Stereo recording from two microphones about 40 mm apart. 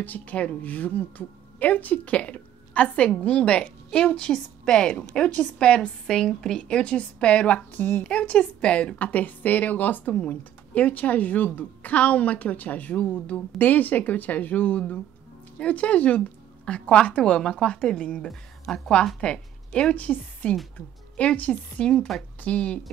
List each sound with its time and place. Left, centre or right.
0.0 s a woman's voice: left
6.0 s a woman's voice: centre
6.6 s a woman's voice: left
7.7 s speech: left
8.0 s a woman's voice: left
15.6 s a woman's voice: left
18.7 s a woman's voice: centre
19.9 s a woman's voice: left